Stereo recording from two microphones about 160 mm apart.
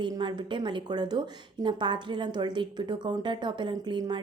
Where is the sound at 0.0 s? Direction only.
25° right (ahead or behind).